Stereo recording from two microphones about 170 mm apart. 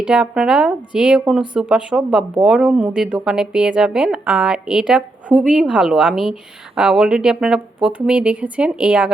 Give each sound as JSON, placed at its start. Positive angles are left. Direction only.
{"t": 0.0, "sound": "speech", "side_deg": -5}